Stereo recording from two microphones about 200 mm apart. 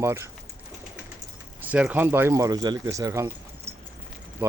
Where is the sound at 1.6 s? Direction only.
5° right (ahead or behind).